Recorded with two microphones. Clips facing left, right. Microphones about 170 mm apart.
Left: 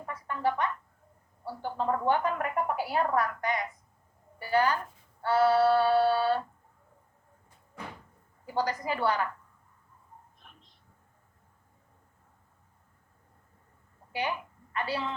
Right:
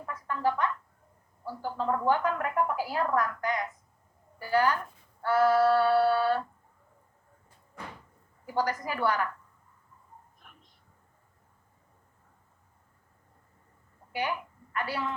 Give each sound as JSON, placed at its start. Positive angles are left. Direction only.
{"t": 0.0, "sound": "music", "side_deg": 25}
{"t": 1.5, "sound": "a woman's voice", "side_deg": 20}
{"t": 8.5, "sound": "a woman's voice", "side_deg": 25}
{"t": 14.1, "sound": "a woman's voice", "side_deg": 25}